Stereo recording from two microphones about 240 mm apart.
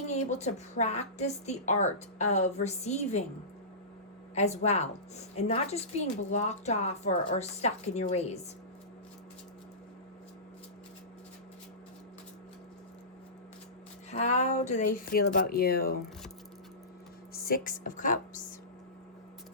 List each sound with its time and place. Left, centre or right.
0.0 s a woman's voice: left
4.6 s a woman's voice: left
14.1 s a woman's voice: left
15.1 s speech: left
17.3 s speech: left